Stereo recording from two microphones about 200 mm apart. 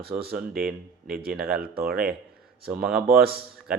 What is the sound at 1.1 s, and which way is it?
Speech, 50° right (ahead or behind).